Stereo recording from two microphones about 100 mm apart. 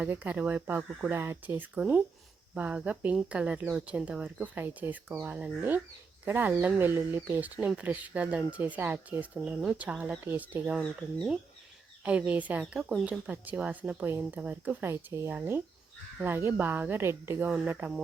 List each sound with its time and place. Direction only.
0.0 s speech: 15° right (ahead or behind)
10.8 s speech: 5° left (ahead or behind)
12.0 s speech: 15° right (ahead or behind)